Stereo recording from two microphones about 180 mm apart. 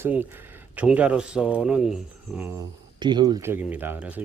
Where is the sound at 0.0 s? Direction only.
10° right (ahead or behind).